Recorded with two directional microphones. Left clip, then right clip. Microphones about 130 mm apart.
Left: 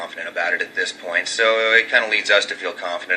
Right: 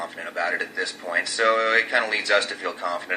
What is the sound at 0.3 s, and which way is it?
A man's voice, 20° left (ahead or behind).